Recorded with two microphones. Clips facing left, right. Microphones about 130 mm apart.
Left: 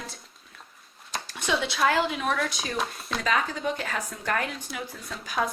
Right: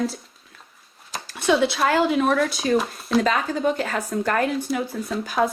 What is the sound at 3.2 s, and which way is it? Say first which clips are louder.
Speech: right 3 dB; 40° right (ahead or behind).